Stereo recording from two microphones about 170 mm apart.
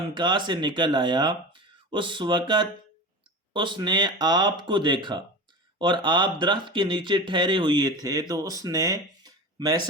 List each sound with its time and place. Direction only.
0.2 s speech: 25° right (ahead or behind)